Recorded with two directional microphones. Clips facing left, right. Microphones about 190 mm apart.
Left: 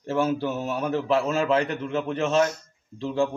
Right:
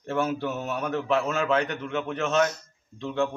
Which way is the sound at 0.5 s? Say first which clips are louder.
Left 3 dB; 30° left (ahead or behind).